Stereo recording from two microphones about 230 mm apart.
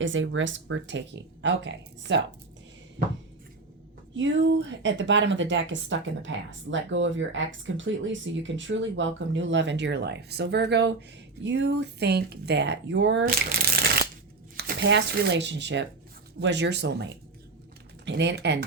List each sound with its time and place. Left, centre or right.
0.0 s speech: right
4.1 s speech: right
14.5 s speech: right